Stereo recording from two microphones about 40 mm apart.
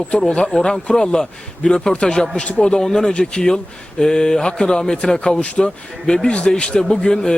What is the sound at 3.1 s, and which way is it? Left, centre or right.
Speech, left.